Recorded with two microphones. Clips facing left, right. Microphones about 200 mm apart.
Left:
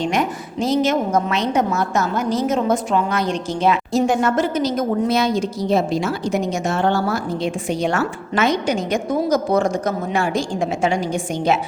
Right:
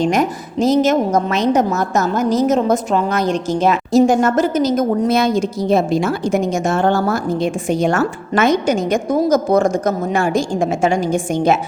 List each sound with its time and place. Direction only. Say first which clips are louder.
0.0 s a woman's voice: right 4 dB; 40° right (ahead or behind)